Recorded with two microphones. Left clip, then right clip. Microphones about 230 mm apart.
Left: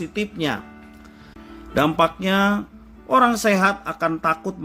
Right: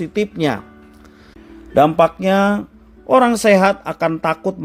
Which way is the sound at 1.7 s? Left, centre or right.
Centre.